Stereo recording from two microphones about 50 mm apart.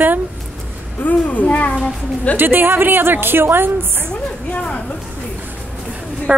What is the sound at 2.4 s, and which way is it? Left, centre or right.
A woman's voice, right.